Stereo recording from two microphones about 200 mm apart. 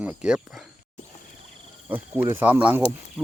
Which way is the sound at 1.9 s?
10° right (ahead or behind).